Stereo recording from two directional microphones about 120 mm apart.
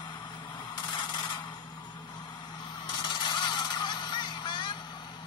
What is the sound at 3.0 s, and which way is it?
Honk, 40° left (ahead or behind).